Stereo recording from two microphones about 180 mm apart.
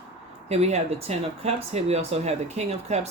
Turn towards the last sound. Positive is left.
turn(degrees=-35)  # may be behind; listen again after turning